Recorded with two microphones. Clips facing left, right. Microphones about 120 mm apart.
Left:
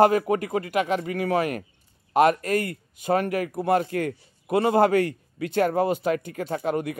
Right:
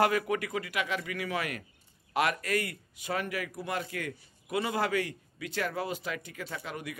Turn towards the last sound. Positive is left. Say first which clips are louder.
# left 13 dB
turn(degrees=50)  # may be behind; listen again after turning